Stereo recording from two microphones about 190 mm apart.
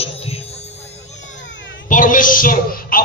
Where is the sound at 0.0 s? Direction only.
30° left (ahead or behind).